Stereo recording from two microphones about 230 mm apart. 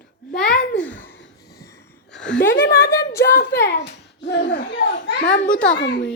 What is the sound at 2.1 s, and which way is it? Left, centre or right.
A child's voice, left.